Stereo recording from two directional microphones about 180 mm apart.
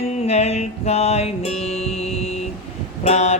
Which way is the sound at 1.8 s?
35° left (ahead or behind).